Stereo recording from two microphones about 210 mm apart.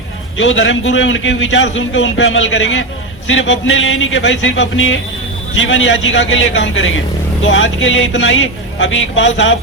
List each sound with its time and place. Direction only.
0.3 s a man's voice: 65° left (ahead or behind)